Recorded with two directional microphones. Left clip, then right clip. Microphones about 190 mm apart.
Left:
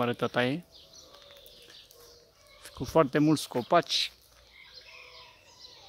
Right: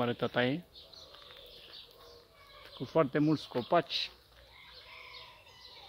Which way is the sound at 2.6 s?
35° left (ahead or behind).